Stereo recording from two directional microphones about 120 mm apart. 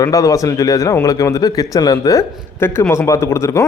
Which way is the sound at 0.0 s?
30° left (ahead or behind).